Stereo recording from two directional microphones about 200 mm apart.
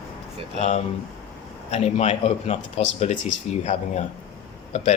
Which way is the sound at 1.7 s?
30° left (ahead or behind).